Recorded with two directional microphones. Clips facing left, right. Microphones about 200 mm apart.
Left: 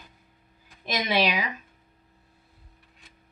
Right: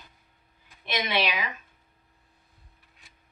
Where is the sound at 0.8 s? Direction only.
40° left (ahead or behind).